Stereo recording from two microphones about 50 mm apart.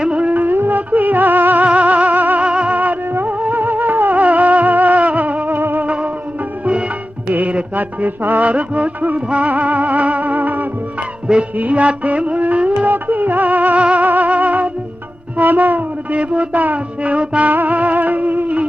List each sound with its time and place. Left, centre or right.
0.0 s music of bollywood: right
1.6 s music: right
2.5 s music: right
2.7 s music: right
5.8 s music: right
11.5 s a sound: right
16.1 s music: right